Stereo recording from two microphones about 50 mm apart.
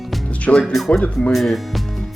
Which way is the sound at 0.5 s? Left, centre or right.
Left.